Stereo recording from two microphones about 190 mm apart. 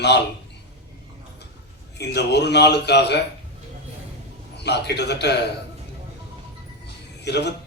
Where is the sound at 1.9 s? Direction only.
65° left (ahead or behind).